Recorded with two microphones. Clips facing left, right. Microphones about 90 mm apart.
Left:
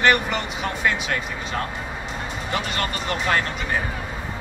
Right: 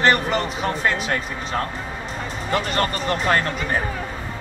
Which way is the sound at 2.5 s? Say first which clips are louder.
Right 5 dB; 40° right (ahead or behind).